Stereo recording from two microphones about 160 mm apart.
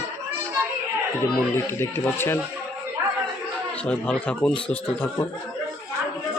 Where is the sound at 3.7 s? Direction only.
10° left (ahead or behind).